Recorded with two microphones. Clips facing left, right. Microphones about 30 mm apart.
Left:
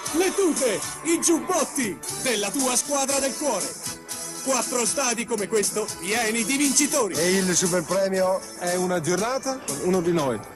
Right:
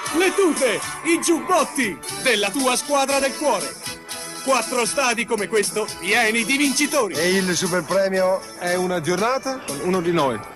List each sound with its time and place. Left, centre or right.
0.0 s speech: right